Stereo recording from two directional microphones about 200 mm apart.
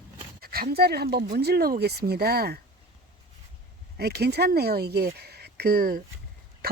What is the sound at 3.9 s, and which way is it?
Speech, 55° right (ahead or behind).